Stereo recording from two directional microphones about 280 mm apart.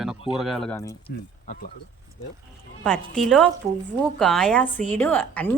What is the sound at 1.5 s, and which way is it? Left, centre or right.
Speech, left.